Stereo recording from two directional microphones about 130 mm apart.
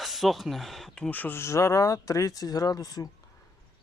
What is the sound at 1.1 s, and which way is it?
Speech, 15° left (ahead or behind).